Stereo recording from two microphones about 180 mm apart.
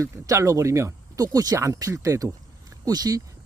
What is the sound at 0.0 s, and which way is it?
Speech, 15° right (ahead or behind).